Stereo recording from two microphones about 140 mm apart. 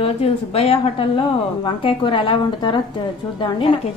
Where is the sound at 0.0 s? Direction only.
45° left (ahead or behind).